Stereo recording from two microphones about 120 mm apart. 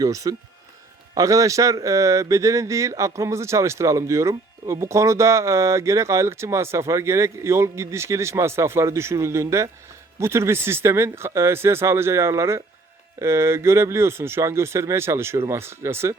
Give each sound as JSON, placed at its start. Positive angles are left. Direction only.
{"t": 0.0, "sound": "speech", "side_deg": -30}